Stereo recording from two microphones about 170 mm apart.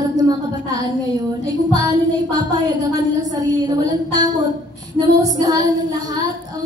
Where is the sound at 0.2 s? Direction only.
20° right (ahead or behind).